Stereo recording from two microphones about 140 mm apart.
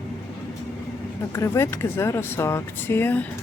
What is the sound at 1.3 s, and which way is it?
Speech, 20° left (ahead or behind).